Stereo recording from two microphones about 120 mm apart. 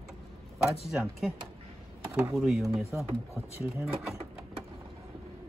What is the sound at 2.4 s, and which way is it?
Speech, 5° right (ahead or behind).